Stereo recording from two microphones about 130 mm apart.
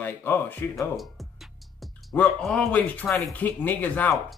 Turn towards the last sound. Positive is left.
turn(degrees=15)  # may be behind; listen again after turning